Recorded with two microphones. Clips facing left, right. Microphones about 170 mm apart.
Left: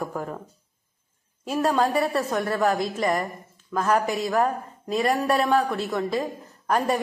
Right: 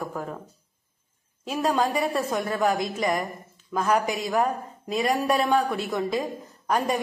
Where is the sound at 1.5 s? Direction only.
Centre (ahead or behind).